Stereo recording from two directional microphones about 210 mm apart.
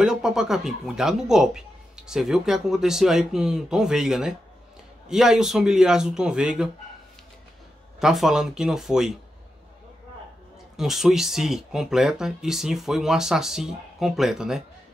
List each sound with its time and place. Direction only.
0.0 s speech: 5° right (ahead or behind)
8.0 s speech: centre (ahead or behind)
10.8 s speech: centre (ahead or behind)